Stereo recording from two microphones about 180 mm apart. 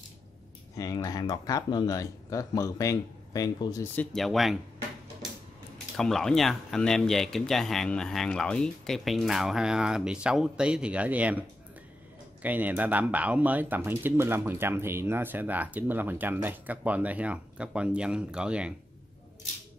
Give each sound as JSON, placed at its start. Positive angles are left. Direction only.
{"t": 0.7, "sound": "speech", "side_deg": 20}
{"t": 3.9, "sound": "speech", "side_deg": 5}
{"t": 5.9, "sound": "speech", "side_deg": 5}